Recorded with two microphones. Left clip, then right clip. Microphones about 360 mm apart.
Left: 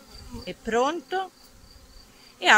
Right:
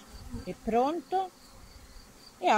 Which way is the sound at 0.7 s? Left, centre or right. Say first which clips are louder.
Left 3 dB; left.